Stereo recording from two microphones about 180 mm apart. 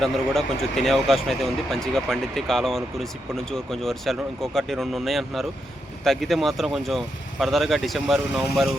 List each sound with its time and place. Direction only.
0.0 s speech: centre (ahead or behind)